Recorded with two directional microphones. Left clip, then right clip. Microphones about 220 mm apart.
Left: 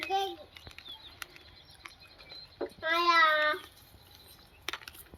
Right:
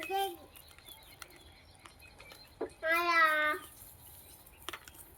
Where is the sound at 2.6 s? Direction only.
25° left (ahead or behind).